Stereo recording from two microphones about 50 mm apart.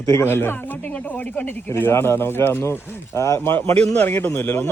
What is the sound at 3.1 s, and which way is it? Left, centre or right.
Speech, left.